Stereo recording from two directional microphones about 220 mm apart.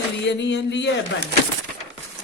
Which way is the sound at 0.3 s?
55° left (ahead or behind).